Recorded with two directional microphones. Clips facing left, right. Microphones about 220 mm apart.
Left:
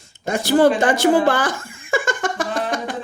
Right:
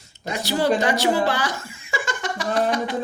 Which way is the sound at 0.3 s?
50° left (ahead or behind).